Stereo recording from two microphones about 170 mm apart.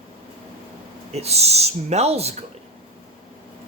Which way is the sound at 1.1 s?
40° right (ahead or behind).